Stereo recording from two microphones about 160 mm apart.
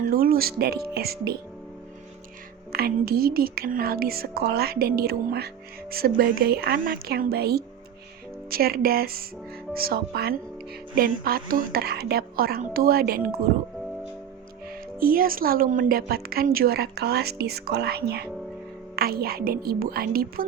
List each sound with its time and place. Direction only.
0.1 s speech: 65° right (ahead or behind)
2.7 s speech: 70° right (ahead or behind)
14.7 s speech: 65° right (ahead or behind); by 18.3 s 80° right
18.9 s speech: 70° right (ahead or behind)